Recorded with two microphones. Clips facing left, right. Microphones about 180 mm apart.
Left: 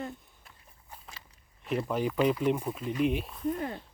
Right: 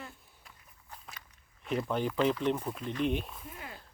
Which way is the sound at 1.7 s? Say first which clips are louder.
Left 2 dB; 5° left (ahead or behind).